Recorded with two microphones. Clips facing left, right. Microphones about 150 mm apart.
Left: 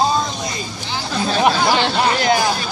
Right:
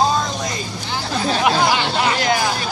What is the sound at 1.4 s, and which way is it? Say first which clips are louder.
Speech: left 2 dB; 30° left (ahead or behind).